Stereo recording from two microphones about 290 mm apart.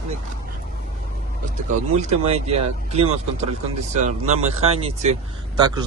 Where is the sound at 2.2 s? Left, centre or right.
Right.